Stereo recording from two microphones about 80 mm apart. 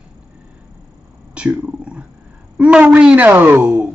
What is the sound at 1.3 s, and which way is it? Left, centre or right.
A woman's voice, centre.